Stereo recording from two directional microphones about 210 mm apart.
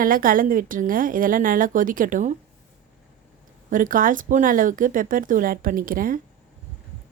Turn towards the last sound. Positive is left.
turn(degrees=-40)  # may be behind; listen again after turning